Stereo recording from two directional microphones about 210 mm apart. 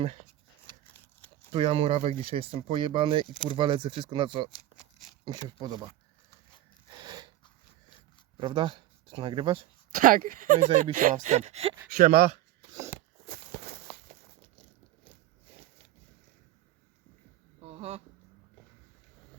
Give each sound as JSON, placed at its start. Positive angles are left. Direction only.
{"t": 1.5, "sound": "speech", "side_deg": -25}
{"t": 6.9, "sound": "a sound", "side_deg": -20}
{"t": 8.4, "sound": "speech", "side_deg": -25}
{"t": 9.9, "sound": "speech", "side_deg": -40}
{"t": 11.9, "sound": "speech", "side_deg": -45}
{"t": 13.2, "sound": "walk", "side_deg": -45}
{"t": 14.5, "sound": "biting", "side_deg": -30}
{"t": 17.6, "sound": "a sound", "side_deg": -30}